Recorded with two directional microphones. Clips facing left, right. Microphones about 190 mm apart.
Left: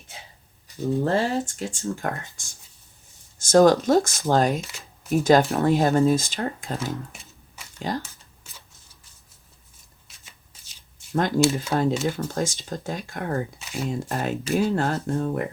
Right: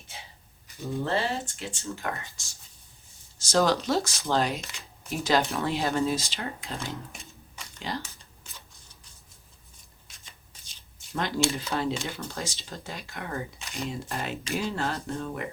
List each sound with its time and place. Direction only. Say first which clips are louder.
1.0 s speech: left 3 dB; 40° left (ahead or behind)
7.1 s a sound: right 1 dB; 5° left (ahead or behind)
7.8 s speech: left 6 dB; 45° left (ahead or behind)
11.1 s speech: left 7 dB; 45° left (ahead or behind)
11.3 s speech: left 6 dB; 5° left (ahead or behind)
11.7 s speech: left 7 dB; 45° left (ahead or behind)
13.6 s a sound: left 5 dB; centre (ahead or behind)
14.1 s speech: left 7 dB; 45° left (ahead or behind)